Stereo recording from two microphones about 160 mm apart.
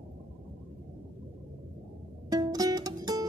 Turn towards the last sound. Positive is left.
turn(degrees=-25)  # may be behind; listen again after turning